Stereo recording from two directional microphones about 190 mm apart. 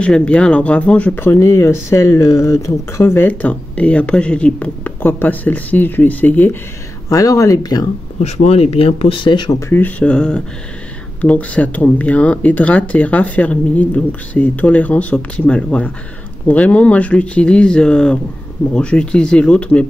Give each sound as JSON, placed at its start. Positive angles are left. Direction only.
{"t": 0.0, "sound": "speech", "side_deg": 5}
{"t": 8.2, "sound": "speech", "side_deg": 35}